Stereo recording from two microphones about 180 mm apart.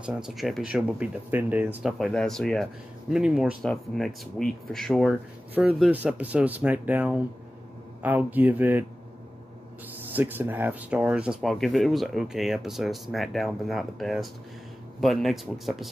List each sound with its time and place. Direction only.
0.0 s speech: 5° right (ahead or behind)
10.0 s speech: 10° right (ahead or behind)